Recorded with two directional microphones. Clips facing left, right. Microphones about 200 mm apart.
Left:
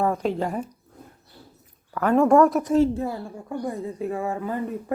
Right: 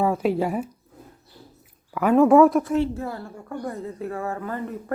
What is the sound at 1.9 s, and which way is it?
Speech, 5° right (ahead or behind).